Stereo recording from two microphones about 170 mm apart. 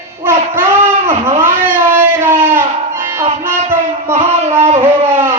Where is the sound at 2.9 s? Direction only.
15° right (ahead or behind).